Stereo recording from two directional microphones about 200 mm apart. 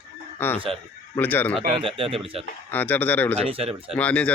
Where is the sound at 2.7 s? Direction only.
10° left (ahead or behind).